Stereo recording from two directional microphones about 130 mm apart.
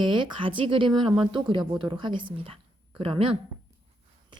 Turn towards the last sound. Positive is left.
turn(degrees=-45)  # may be behind; listen again after turning